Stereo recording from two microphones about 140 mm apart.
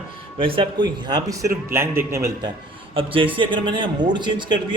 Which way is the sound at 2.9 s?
40° right (ahead or behind).